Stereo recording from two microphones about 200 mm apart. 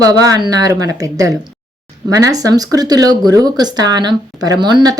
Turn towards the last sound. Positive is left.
turn(degrees=-20)  # may be behind; listen again after turning